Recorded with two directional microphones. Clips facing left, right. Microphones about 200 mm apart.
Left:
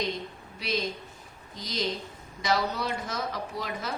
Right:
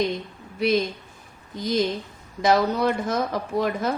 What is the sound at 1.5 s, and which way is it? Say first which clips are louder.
A woman's voice: right 8 dB; 55° right (ahead or behind).